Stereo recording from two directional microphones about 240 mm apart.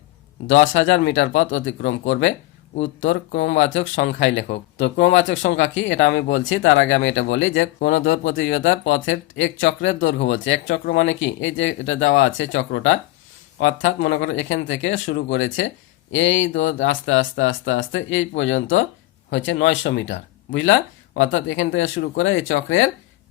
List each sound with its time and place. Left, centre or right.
0.4 s speech: left